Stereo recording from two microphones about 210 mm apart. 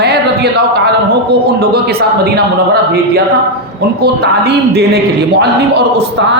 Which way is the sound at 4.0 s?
50° right (ahead or behind).